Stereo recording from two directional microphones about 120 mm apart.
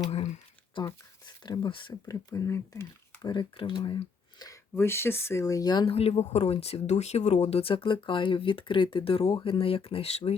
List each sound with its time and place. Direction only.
0.1 s speech: 65° left (ahead or behind)
0.7 s speech: 45° left (ahead or behind)
1.9 s speech: 25° left (ahead or behind)
3.2 s speech: 40° left (ahead or behind)
4.8 s speech: 20° left (ahead or behind)
5.8 s speech: 55° left (ahead or behind)